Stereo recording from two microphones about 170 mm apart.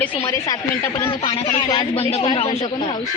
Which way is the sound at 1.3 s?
35° left (ahead or behind).